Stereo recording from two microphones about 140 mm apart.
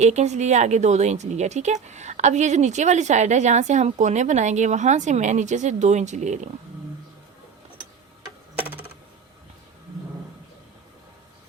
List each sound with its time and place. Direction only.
0.0 s a woman's voice: 55° right (ahead or behind)